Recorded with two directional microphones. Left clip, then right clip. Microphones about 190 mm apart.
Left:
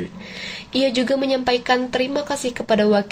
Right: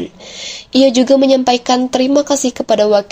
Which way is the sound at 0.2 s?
25° right (ahead or behind).